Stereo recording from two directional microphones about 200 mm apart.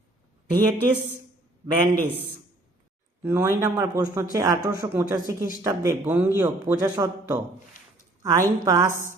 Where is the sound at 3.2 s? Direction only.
10° right (ahead or behind).